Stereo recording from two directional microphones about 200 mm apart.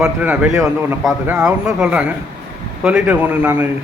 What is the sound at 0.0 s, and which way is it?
A man's voice, 5° right (ahead or behind).